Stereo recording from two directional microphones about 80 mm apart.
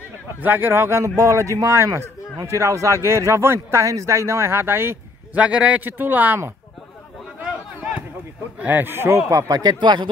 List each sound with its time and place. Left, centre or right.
0.4 s speech: right
5.4 s a man's voice: centre
8.5 s speech: right
9.8 s speech: right